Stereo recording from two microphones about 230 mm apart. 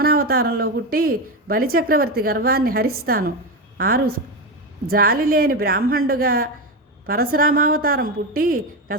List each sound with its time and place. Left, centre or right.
0.0 s speech: right